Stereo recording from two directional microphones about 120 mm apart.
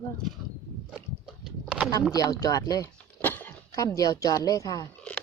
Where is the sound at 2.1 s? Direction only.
30° left (ahead or behind).